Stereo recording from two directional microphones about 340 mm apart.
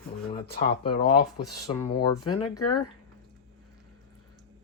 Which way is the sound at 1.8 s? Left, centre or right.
Centre.